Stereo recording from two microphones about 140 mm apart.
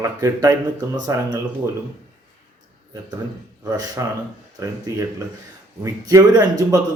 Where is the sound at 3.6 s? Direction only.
25° right (ahead or behind).